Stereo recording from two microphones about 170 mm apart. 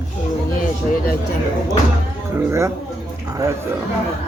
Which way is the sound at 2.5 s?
15° right (ahead or behind).